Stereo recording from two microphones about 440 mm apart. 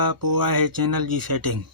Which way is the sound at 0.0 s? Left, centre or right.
Right.